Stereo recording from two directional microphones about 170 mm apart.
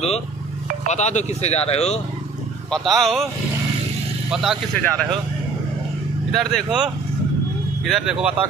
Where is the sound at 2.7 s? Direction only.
Centre (ahead or behind).